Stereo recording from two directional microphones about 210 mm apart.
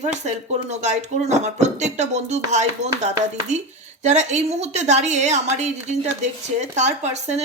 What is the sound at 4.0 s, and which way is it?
Speech, 35° right (ahead or behind).